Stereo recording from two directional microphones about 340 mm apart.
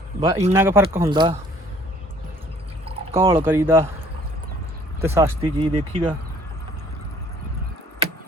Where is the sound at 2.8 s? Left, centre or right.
Centre.